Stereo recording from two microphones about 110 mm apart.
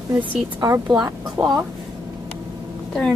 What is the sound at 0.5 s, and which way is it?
Speech, 35° right (ahead or behind).